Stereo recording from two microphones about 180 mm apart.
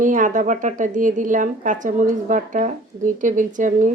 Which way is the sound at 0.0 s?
45° right (ahead or behind).